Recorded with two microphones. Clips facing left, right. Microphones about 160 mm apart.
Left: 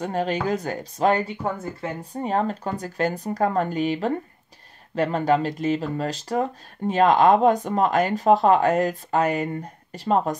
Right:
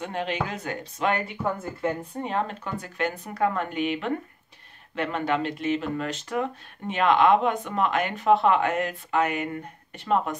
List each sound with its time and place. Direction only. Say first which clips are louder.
0.0 s speech: left 5 dB; 40° left (ahead or behind)